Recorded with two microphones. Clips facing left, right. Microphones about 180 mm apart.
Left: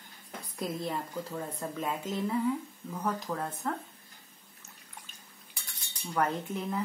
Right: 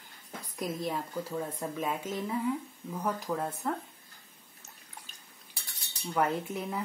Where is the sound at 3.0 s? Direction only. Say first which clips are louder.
Right 1 dB; 5° right (ahead or behind).